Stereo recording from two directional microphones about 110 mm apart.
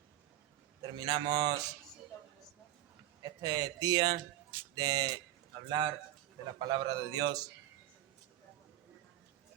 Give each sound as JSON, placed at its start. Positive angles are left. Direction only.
{"t": 0.8, "sound": "a man's voice", "side_deg": -40}
{"t": 3.2, "sound": "a man's voice", "side_deg": -40}